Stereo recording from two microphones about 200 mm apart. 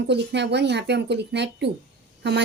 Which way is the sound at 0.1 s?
55° right (ahead or behind).